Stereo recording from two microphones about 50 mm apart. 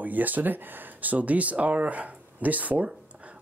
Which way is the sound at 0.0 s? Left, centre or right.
Right.